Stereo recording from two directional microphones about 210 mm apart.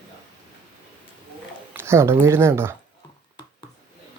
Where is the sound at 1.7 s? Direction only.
10° right (ahead or behind).